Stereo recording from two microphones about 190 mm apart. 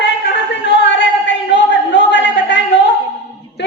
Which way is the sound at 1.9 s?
65° left (ahead or behind).